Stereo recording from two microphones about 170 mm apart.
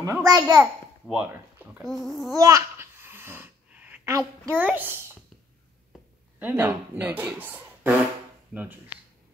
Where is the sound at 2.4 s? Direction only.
20° right (ahead or behind).